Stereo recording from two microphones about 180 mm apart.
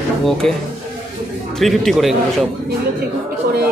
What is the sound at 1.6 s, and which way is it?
Speech, centre (ahead or behind).